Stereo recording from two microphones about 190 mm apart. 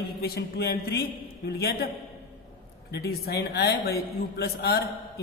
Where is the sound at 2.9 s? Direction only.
55° left (ahead or behind).